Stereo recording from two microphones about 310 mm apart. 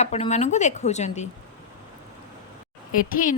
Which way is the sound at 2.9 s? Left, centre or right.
Left.